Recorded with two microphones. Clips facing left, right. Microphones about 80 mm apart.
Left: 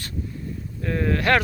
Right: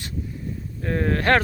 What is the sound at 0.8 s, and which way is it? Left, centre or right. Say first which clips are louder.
Speech: even; right.